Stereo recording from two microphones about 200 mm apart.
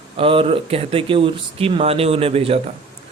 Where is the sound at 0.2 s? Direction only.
25° right (ahead or behind).